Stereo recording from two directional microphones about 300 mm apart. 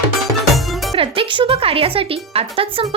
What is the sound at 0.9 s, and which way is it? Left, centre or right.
Speech, centre.